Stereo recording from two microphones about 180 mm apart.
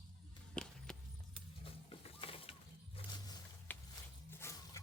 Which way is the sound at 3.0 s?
30° left (ahead or behind).